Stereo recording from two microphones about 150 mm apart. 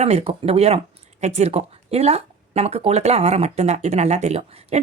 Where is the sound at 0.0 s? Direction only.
45° right (ahead or behind).